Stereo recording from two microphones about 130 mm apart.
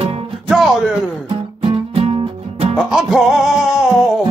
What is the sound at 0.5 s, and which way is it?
Music, 5° right (ahead or behind).